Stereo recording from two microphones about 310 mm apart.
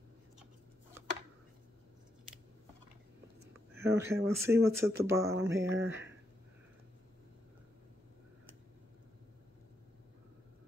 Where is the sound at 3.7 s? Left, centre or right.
Centre.